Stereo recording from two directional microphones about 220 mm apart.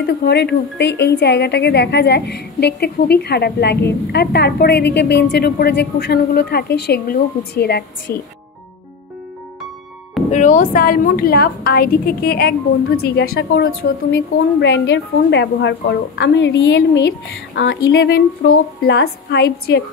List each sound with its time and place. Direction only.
0.0 s a woman's voice: 50° left (ahead or behind)
10.3 s a woman's voice: 35° left (ahead or behind)